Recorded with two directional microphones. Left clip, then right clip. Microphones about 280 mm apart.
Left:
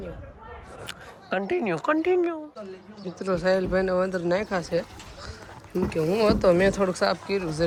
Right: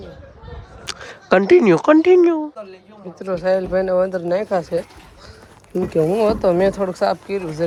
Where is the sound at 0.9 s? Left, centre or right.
Right.